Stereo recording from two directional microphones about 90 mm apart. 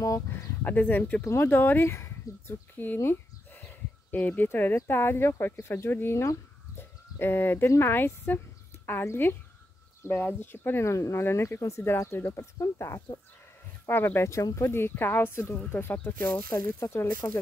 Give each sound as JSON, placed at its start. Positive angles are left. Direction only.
{"t": 0.0, "sound": "speech", "side_deg": 40}
{"t": 16.6, "sound": "speech", "side_deg": 30}